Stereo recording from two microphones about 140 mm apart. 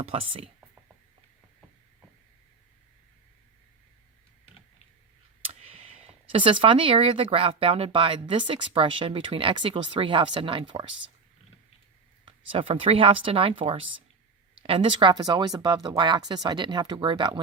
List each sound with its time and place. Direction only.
0.0 s speech: 45° right (ahead or behind)
5.4 s clicking: 45° right (ahead or behind)
6.3 s speech: 40° right (ahead or behind)
12.2 s speech: 40° right (ahead or behind)